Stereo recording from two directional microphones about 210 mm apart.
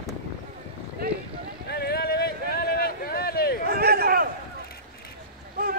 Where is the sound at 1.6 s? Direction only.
50° left (ahead or behind).